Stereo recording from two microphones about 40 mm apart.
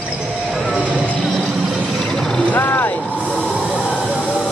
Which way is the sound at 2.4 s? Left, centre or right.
Left.